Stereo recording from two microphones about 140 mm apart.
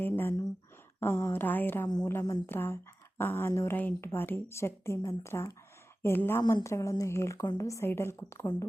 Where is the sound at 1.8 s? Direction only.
30° left (ahead or behind).